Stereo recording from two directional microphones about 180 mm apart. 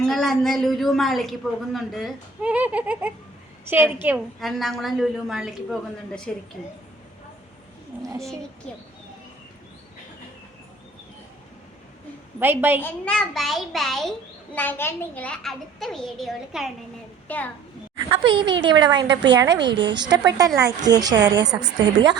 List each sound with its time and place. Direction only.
0.0 s a child's voice: centre (ahead or behind)
8.0 s a woman's voice: 15° right (ahead or behind)
12.4 s a woman's voice: 10° right (ahead or behind)
12.8 s a child's voice: 5° left (ahead or behind)
18.1 s a woman's voice: 25° right (ahead or behind)